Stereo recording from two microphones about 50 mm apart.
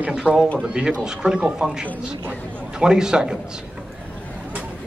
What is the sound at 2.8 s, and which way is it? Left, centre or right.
Speech, centre.